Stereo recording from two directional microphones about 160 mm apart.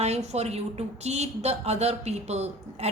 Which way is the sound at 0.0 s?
45° right (ahead or behind).